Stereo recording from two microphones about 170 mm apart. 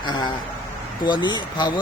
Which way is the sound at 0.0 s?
25° left (ahead or behind).